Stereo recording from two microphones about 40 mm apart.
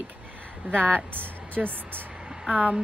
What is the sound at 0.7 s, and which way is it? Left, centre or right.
Speech, left.